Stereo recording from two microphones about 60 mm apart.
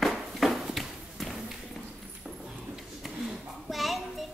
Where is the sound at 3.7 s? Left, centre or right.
Centre.